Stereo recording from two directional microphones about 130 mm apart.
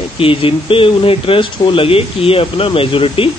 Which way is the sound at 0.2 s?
45° left (ahead or behind).